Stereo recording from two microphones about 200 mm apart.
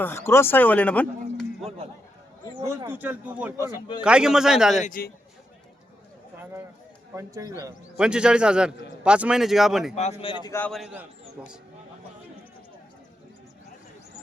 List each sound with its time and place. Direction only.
0.0 s speech: 10° left (ahead or behind)
2.6 s a man's voice: 10° right (ahead or behind)
3.6 s a man's voice: 25° left (ahead or behind)
4.0 s a man's voice: 5° right (ahead or behind)
4.8 s a man's voice: 45° left (ahead or behind)
6.3 s a sound: 10° right (ahead or behind)
7.2 s a man's voice: 15° right (ahead or behind)
7.9 s a man's voice: 5° right (ahead or behind)
9.9 s a man's voice: 35° left (ahead or behind)
10.5 s a man's voice: 5° left (ahead or behind)